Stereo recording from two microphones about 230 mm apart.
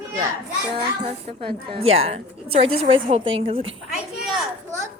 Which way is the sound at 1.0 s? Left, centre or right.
Right.